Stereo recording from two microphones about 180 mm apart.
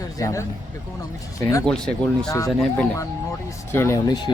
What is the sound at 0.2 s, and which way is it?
Speech, 15° left (ahead or behind).